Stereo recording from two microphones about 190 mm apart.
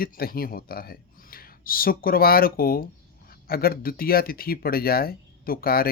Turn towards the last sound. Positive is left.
turn(degrees=50)  # may be behind; listen again after turning